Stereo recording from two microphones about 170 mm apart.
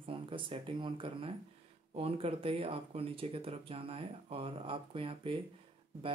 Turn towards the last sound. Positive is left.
turn(degrees=-30)  # may be behind; listen again after turning